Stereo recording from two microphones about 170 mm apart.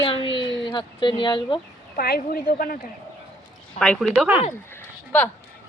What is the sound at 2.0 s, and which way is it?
Speech, 65° left (ahead or behind).